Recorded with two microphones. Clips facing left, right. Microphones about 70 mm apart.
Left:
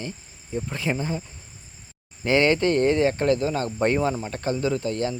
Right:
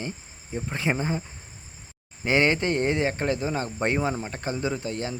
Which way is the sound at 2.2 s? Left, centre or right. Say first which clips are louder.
Left 3 dB; centre.